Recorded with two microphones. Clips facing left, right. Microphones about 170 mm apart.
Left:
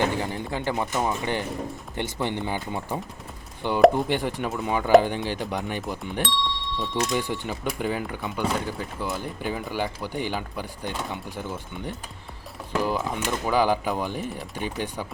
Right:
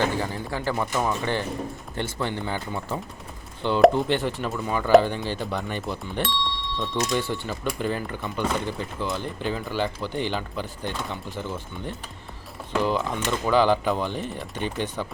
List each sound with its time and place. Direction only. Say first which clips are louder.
0.0 s speech: even; 20° left (ahead or behind)
6.2 s doorbell: even; centre (ahead or behind)
6.9 s speech: even; 15° left (ahead or behind)